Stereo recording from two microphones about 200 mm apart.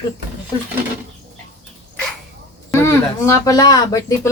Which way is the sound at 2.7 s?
15° left (ahead or behind).